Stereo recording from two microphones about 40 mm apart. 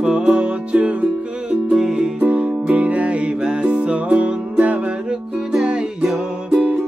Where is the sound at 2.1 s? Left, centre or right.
Right.